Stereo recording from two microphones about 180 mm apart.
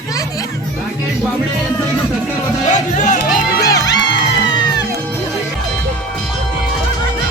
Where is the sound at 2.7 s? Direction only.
40° left (ahead or behind).